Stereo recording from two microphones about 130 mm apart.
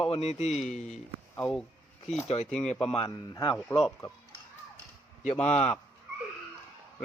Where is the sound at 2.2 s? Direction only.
55° left (ahead or behind).